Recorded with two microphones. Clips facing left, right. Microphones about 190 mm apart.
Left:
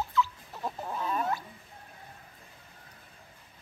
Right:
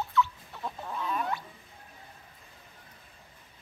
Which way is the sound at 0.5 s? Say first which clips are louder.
Left 2 dB; 30° left (ahead or behind).